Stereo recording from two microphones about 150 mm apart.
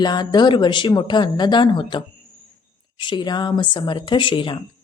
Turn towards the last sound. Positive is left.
turn(degrees=35)  # may be behind; listen again after turning